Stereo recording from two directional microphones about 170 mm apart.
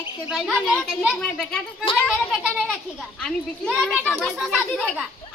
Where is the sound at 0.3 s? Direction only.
Centre (ahead or behind).